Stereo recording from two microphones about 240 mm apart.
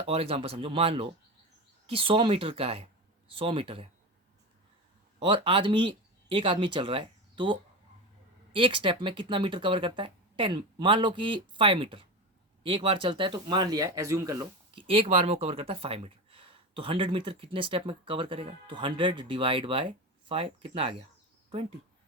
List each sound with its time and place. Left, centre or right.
0.0 s speech: right
5.2 s speech: right